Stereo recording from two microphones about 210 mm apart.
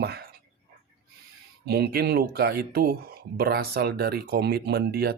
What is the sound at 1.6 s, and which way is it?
Speech, 50° right (ahead or behind).